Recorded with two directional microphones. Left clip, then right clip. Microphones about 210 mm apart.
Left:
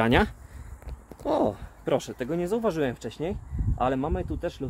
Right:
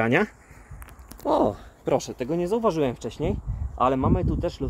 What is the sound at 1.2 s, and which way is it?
Speech, 20° right (ahead or behind).